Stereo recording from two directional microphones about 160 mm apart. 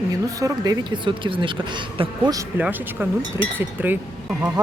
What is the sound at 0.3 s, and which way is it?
Speech, 20° right (ahead or behind).